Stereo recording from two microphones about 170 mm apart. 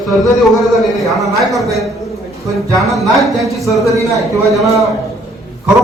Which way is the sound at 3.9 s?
20° right (ahead or behind).